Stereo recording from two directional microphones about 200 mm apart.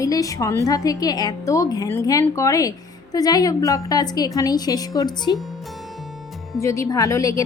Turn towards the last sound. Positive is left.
turn(degrees=15)  # may be behind; listen again after turning